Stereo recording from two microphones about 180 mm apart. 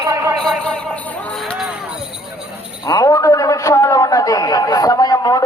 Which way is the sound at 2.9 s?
20° left (ahead or behind).